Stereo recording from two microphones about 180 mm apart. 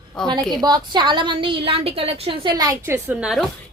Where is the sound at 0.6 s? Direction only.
25° right (ahead or behind); by 3.4 s 5° right (ahead or behind).